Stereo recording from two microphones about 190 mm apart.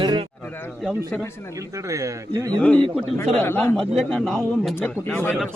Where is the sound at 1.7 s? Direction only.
15° right (ahead or behind).